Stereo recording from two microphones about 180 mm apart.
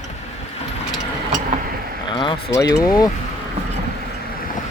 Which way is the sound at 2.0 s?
25° left (ahead or behind).